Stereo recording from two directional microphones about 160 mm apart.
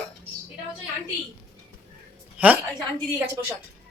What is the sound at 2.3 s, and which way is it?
Speech, 10° right (ahead or behind).